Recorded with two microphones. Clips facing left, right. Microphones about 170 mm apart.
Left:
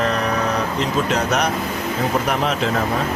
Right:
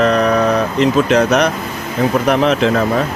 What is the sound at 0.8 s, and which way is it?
A man's voice, 70° right (ahead or behind).